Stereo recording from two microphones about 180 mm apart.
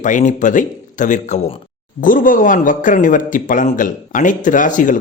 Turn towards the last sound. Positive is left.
turn(degrees=45)  # may be behind; listen again after turning